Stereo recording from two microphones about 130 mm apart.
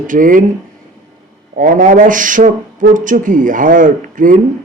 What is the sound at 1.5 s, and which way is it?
Speech, 90° right.